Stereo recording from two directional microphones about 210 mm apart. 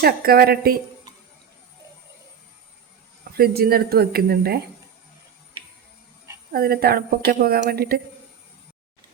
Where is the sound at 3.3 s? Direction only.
45° right (ahead or behind).